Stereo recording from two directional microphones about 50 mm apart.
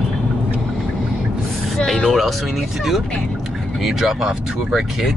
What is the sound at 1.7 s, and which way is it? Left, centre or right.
Speech, centre.